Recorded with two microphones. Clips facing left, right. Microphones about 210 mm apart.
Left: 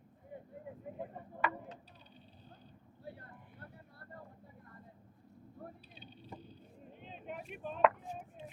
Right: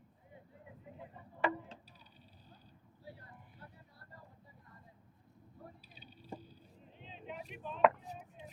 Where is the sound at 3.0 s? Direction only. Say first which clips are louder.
Left 3 dB; 55° left (ahead or behind).